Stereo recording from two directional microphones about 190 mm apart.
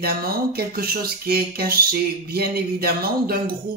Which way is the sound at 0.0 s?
55° right (ahead or behind).